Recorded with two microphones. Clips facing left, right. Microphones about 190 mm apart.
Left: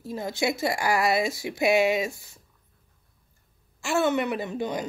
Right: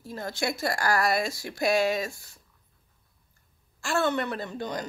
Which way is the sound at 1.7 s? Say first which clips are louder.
Left 3 dB; 15° left (ahead or behind).